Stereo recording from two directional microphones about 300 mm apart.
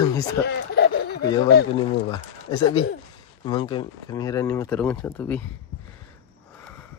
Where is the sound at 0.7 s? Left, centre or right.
Left.